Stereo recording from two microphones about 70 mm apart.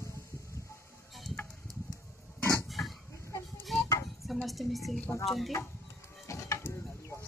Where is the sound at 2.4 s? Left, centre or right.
Left.